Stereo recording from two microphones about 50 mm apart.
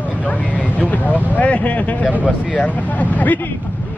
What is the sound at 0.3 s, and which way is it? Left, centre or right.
Vehicle, left.